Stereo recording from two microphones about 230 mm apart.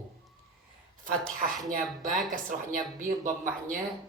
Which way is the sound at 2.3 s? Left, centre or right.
Right.